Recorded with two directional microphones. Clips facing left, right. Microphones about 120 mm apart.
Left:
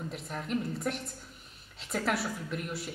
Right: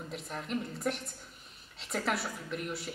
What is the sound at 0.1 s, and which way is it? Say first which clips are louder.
A woman's voice: left 1 dB; centre (ahead or behind).